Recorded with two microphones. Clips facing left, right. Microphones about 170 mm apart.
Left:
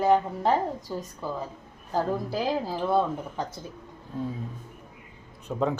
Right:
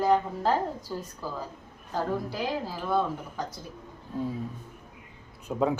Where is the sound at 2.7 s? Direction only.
30° left (ahead or behind).